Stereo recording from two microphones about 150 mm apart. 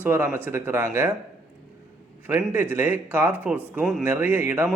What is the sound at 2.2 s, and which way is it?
Speech, 10° right (ahead or behind).